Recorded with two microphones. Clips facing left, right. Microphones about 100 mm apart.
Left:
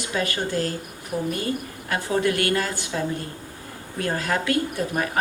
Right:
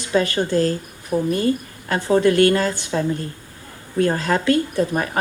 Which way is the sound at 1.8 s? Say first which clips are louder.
Right 6 dB; 35° right (ahead or behind).